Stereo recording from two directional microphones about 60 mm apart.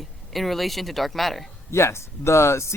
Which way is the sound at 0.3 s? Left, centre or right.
Centre.